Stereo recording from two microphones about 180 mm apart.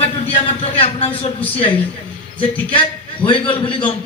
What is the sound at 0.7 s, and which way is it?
Speech, 35° left (ahead or behind).